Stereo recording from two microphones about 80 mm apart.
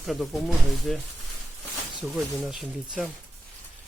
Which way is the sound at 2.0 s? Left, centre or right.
Centre.